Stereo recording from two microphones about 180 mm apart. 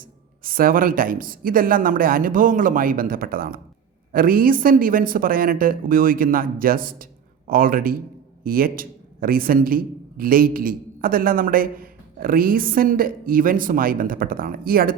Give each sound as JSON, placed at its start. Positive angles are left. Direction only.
{"t": 0.0, "sound": "a man's voice", "side_deg": -50}